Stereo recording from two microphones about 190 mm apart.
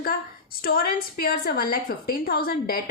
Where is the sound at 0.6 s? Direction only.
50° left (ahead or behind).